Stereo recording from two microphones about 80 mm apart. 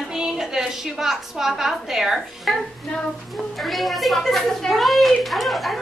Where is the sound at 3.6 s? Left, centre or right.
Centre.